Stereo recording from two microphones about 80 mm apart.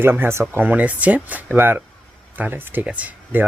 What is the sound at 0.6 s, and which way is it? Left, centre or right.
Speech, centre.